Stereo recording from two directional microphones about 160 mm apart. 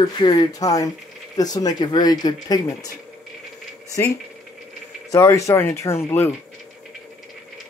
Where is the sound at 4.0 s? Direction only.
15° left (ahead or behind).